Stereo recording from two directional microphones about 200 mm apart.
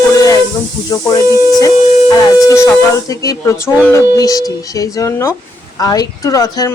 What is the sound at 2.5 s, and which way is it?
Speech, 15° left (ahead or behind).